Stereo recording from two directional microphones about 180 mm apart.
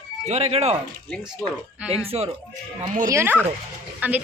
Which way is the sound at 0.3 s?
35° right (ahead or behind).